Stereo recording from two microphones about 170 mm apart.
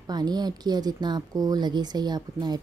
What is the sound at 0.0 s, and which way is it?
Speech, 25° right (ahead or behind).